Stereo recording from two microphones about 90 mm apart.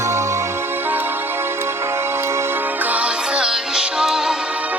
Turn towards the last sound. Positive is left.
turn(degrees=-10)  # may be behind; listen again after turning